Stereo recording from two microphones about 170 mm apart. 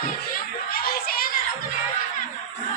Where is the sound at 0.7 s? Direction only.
60° left (ahead or behind).